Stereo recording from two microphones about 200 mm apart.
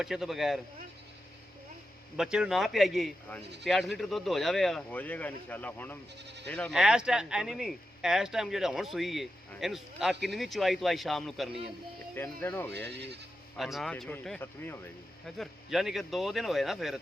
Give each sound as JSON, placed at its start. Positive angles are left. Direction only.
{"t": 0.0, "sound": "speech", "side_deg": 0}
{"t": 2.1, "sound": "speech", "side_deg": -5}
{"t": 12.7, "sound": "speech", "side_deg": -55}
{"t": 13.6, "sound": "speech", "side_deg": 0}
{"t": 15.4, "sound": "speech", "side_deg": 0}